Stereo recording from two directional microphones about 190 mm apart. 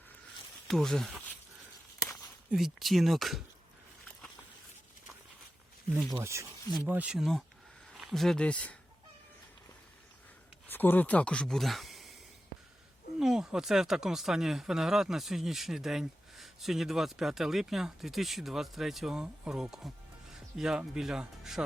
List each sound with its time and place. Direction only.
0.7 s speech: centre (ahead or behind)
2.5 s speech: centre (ahead or behind)
5.9 s speech: 20° right (ahead or behind); by 8.7 s 5° left (ahead or behind)
10.7 s speech: 10° left (ahead or behind)
13.1 s speech: centre (ahead or behind)